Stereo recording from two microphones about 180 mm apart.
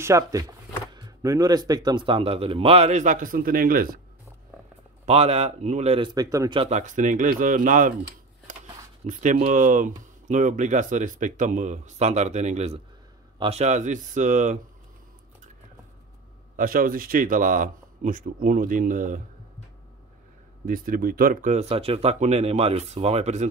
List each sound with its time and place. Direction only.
0.0 s speech: 20° right (ahead or behind); by 4.0 s 55° right (ahead or behind)
5.0 s speech: 35° right (ahead or behind); by 6.6 s 20° right (ahead or behind)
6.6 s speech: 40° right (ahead or behind)
8.5 s a sound: 45° right (ahead or behind)
9.0 s speech: 40° right (ahead or behind)
16.5 s speech: 50° right (ahead or behind)
20.6 s speech: 50° right (ahead or behind)